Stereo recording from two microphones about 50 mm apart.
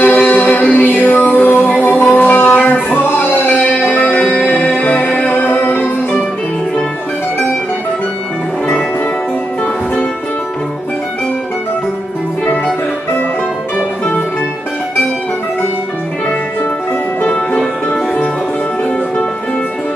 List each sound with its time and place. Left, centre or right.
0.0 s music: left
4.1 s music: left
4.6 s music: left
17.2 s music: left